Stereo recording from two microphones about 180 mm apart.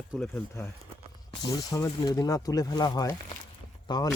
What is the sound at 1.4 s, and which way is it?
Speech, 20° left (ahead or behind).